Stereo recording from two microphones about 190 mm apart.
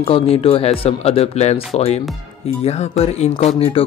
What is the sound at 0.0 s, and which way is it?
Speech, 30° left (ahead or behind).